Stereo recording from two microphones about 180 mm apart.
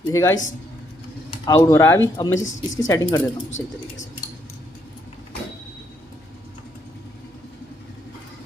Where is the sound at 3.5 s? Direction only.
90° left.